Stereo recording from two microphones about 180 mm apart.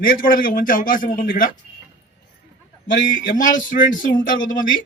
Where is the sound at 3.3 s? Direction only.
45° left (ahead or behind).